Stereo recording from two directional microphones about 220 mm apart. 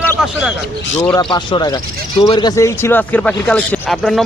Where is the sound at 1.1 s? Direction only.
20° left (ahead or behind).